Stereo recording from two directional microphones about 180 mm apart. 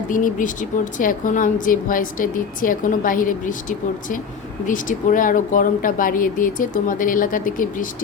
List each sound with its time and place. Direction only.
0.1 s a woman's voice: 45° left (ahead or behind)